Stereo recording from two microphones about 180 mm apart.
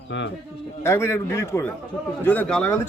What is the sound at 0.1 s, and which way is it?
Speech, 90° left.